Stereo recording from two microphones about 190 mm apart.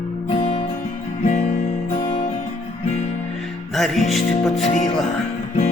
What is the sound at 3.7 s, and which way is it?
Music, centre (ahead or behind).